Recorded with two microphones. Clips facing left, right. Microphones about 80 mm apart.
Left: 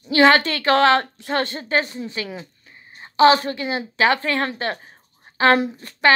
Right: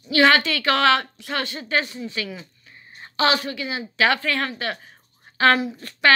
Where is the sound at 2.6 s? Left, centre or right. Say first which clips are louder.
Left 1 dB; left.